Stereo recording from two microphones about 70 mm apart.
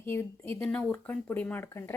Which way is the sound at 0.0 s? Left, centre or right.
Left.